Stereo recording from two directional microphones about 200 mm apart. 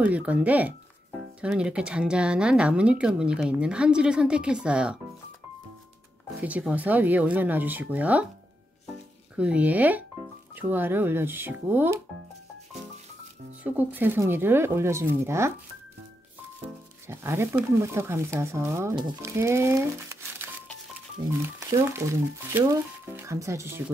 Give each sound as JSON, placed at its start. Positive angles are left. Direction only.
{"t": 0.0, "sound": "speech", "side_deg": -5}
{"t": 6.4, "sound": "speech", "side_deg": -5}
{"t": 9.4, "sound": "speech", "side_deg": -5}
{"t": 13.7, "sound": "speech", "side_deg": -10}
{"t": 17.1, "sound": "speech", "side_deg": -15}
{"t": 21.7, "sound": "speech", "side_deg": -15}